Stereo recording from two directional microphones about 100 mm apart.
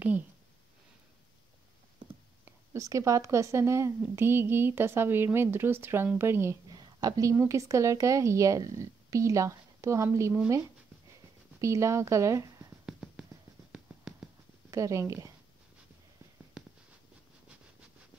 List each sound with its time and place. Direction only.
2.4 s speech: 30° right (ahead or behind)
6.7 s a sound: 45° right (ahead or behind)
7.3 s a woman's voice: 30° right (ahead or behind)
11.6 s speech: 30° right (ahead or behind)
12.8 s a sound: 5° right (ahead or behind)
14.7 s a woman's voice: 30° right (ahead or behind)